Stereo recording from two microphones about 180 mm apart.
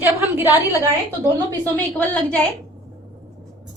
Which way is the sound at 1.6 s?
10° left (ahead or behind).